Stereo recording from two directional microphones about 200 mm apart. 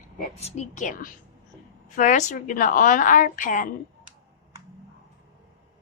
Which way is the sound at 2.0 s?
40° left (ahead or behind).